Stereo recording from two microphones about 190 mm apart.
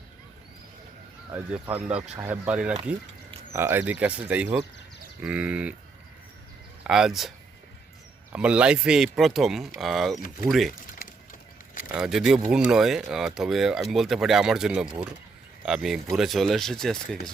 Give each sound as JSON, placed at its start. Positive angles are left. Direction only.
{"t": 1.3, "sound": "speech", "side_deg": -5}
{"t": 6.8, "sound": "speech", "side_deg": -5}
{"t": 10.9, "sound": "a sound", "side_deg": 45}
{"t": 11.9, "sound": "speech", "side_deg": 0}